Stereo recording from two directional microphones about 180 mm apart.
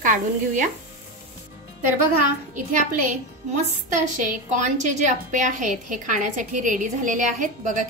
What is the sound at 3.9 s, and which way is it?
A woman's voice, 45° right (ahead or behind).